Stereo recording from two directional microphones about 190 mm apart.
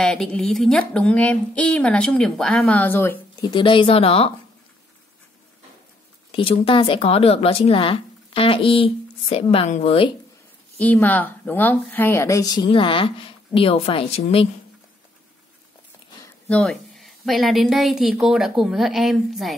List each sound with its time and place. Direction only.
0.0 s a woman's voice: 5° left (ahead or behind)
3.4 s a woman's voice: 25° left (ahead or behind)
6.3 s a woman's voice: 30° left (ahead or behind)
10.8 s a woman's voice: 10° left (ahead or behind); by 14.5 s 30° left (ahead or behind)
16.4 s a woman's voice: 5° left (ahead or behind)